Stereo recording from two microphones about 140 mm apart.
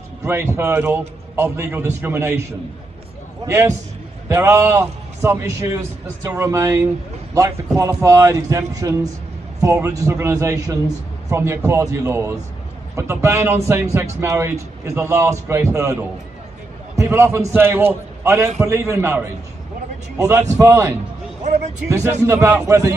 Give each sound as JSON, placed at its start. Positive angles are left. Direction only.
{"t": 0.2, "sound": "a man's voice", "side_deg": -15}
{"t": 3.4, "sound": "a man's voice", "side_deg": -20}